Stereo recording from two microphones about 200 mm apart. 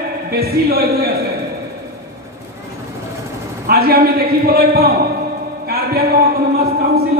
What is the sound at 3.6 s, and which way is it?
A man's voice, 50° right (ahead or behind).